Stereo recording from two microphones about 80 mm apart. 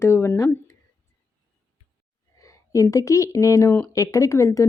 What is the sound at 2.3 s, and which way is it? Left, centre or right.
Speech, left.